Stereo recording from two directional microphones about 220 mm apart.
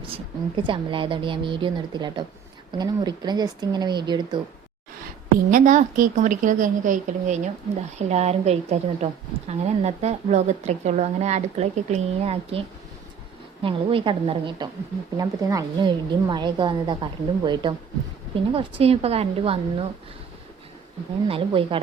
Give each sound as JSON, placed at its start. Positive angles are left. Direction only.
{"t": 0.1, "sound": "a woman's voice", "side_deg": -25}
{"t": 5.5, "sound": "a woman's voice", "side_deg": -35}
{"t": 21.2, "sound": "a woman's voice", "side_deg": -25}